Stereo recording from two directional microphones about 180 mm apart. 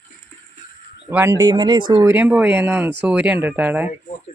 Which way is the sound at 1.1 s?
15° right (ahead or behind).